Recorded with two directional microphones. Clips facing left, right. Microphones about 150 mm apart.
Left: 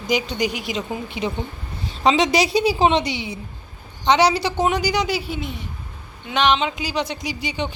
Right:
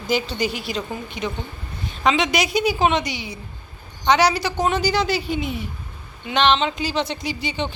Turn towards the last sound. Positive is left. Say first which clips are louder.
# even
turn(degrees=10)  # may be behind; listen again after turning